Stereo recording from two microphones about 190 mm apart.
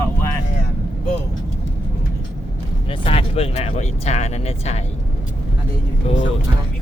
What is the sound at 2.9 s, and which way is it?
Speech, 30° left (ahead or behind).